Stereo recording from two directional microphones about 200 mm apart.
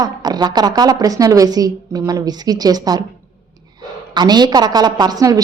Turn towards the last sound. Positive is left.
turn(degrees=-20)  # may be behind; listen again after turning